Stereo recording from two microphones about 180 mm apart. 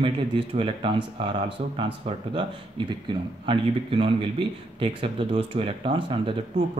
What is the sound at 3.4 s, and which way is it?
A man's voice, 30° right (ahead or behind).